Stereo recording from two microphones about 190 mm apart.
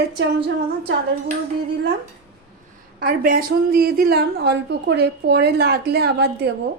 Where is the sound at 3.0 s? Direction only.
50° right (ahead or behind).